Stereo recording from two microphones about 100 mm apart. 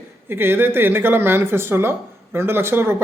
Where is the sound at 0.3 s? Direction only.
20° right (ahead or behind).